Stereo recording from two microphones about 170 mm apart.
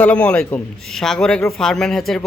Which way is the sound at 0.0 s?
10° left (ahead or behind).